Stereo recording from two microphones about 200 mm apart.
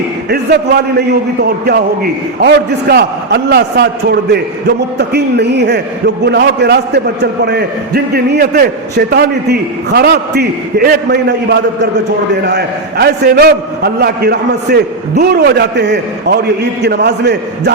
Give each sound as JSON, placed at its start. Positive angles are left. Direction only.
{"t": 0.9, "sound": "a man's voice", "side_deg": -55}